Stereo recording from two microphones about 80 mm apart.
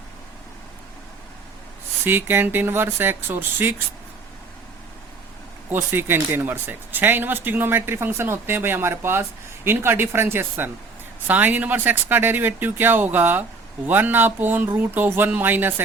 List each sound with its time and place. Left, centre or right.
2.0 s speech: right
5.6 s speech: right